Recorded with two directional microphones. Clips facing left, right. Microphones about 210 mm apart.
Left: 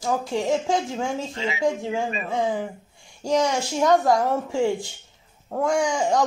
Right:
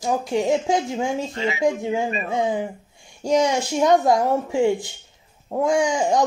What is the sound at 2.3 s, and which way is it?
A woman's voice, 15° right (ahead or behind).